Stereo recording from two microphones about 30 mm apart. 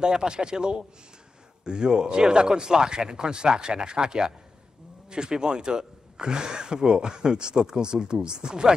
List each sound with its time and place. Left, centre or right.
0.0 s speech: right